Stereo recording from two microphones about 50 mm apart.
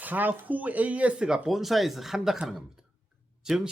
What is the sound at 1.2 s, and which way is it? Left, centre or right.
Speech, centre.